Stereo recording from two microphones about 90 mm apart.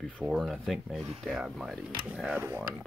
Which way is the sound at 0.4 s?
Centre (ahead or behind).